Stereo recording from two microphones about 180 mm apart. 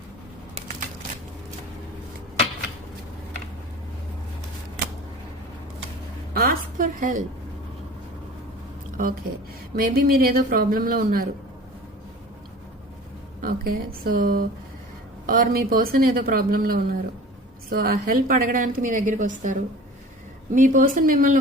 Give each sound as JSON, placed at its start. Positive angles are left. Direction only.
{"t": 6.3, "sound": "a sound", "side_deg": -55}
{"t": 8.9, "sound": "speech", "side_deg": -50}
{"t": 13.4, "sound": "a woman's voice", "side_deg": -55}